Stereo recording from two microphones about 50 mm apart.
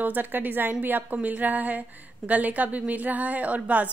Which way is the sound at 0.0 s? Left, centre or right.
Right.